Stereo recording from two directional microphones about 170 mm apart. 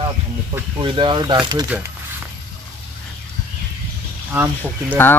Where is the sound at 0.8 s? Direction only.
30° right (ahead or behind).